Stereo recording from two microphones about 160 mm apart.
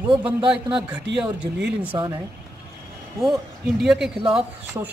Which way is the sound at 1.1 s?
90° right.